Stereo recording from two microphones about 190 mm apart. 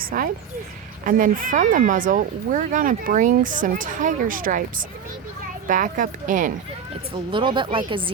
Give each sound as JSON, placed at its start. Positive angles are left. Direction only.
{"t": 0.0, "sound": "speech", "side_deg": -50}
{"t": 5.6, "sound": "speech", "side_deg": -45}
{"t": 7.3, "sound": "speech", "side_deg": -25}